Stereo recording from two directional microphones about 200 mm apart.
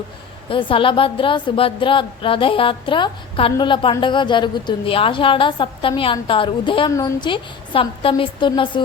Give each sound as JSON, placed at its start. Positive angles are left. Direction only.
{"t": 0.4, "sound": "a woman's voice", "side_deg": 25}